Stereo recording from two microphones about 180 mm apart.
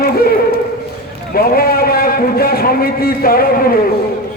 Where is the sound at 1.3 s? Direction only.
55° left (ahead or behind).